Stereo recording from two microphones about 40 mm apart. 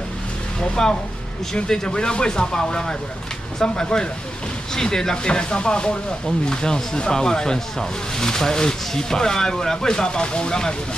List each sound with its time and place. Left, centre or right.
0.8 s speech: centre